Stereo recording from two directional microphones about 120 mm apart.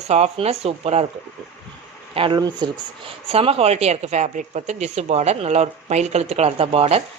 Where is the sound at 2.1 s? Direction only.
50° right (ahead or behind).